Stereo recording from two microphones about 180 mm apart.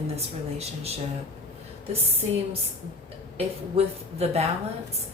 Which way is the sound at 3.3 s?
35° right (ahead or behind).